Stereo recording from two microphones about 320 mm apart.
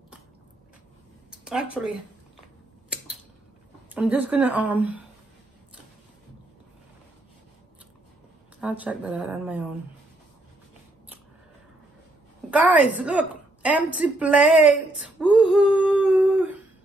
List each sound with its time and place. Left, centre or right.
1.3 s speech: centre
3.9 s a woman's voice: centre
8.5 s a woman's voice: centre
12.4 s a woman's voice: centre
15.0 s a sound: centre